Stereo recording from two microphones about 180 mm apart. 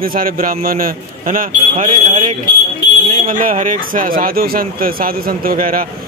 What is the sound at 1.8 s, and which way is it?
Speech, 40° right (ahead or behind).